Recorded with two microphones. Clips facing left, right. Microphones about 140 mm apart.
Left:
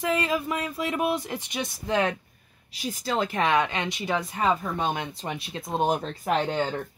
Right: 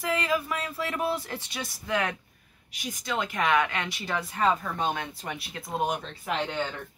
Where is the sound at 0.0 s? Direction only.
25° left (ahead or behind).